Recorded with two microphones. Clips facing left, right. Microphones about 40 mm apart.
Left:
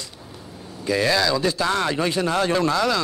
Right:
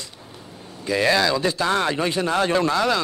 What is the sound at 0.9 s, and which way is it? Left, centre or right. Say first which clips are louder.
Speech: right 1 dB; centre.